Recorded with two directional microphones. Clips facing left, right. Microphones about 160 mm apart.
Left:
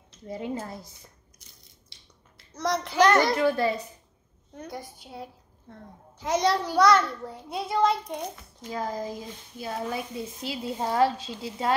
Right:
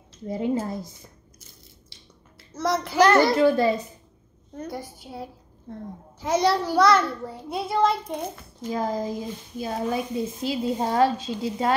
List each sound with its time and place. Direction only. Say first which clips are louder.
0.3 s speech: right 7 dB; 25° right (ahead or behind)
1.4 s crushing: right 3 dB; 5° right (ahead or behind)
2.5 s a child's voice: right 3 dB; 5° right (ahead or behind)
3.3 s speech: right 5 dB; 30° right (ahead or behind)
4.6 s a child's voice: right 4 dB; 5° right (ahead or behind)
8.7 s speech: right 4 dB; 25° right (ahead or behind)